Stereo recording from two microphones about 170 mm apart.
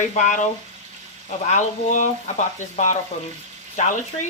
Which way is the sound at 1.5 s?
45° left (ahead or behind).